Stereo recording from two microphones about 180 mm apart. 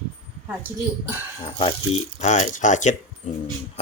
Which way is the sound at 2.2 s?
40° left (ahead or behind).